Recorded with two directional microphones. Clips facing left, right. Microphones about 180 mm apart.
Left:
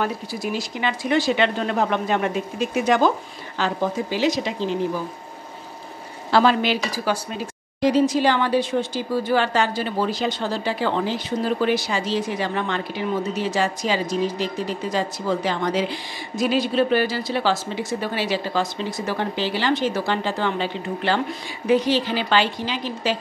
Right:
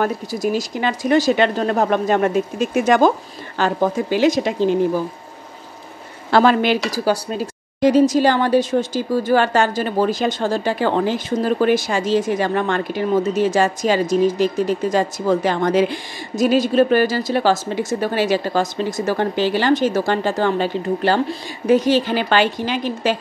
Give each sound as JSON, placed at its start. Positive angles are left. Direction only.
{"t": 0.0, "sound": "speech", "side_deg": -40}
{"t": 6.3, "sound": "speech", "side_deg": -50}